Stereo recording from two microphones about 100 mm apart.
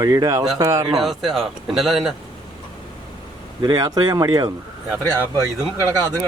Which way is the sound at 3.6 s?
35° right (ahead or behind).